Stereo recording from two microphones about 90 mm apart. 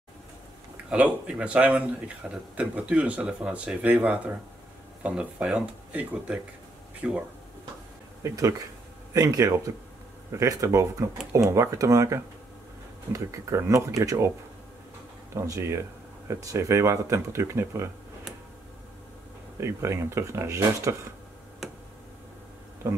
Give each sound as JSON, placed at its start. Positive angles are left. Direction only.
{"t": 0.8, "sound": "speech", "side_deg": -15}
{"t": 8.2, "sound": "speech", "side_deg": -40}
{"t": 15.3, "sound": "speech", "side_deg": -35}
{"t": 19.6, "sound": "speech", "side_deg": -30}
{"t": 22.8, "sound": "speech", "side_deg": -30}